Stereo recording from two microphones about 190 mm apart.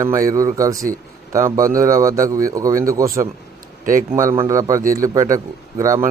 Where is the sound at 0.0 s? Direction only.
15° right (ahead or behind).